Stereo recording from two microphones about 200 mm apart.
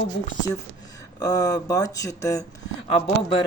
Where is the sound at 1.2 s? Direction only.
20° left (ahead or behind).